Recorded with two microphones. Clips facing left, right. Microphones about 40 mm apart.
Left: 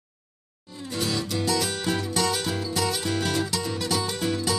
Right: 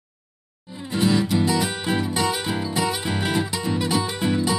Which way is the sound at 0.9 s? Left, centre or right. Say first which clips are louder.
Right 8 dB; right.